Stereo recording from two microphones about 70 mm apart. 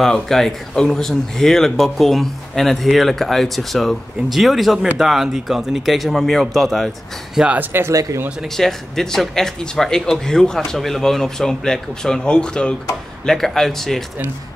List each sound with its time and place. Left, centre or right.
0.0 s speech: centre
7.5 s speech: right
7.9 s speech: right
8.5 s speech: centre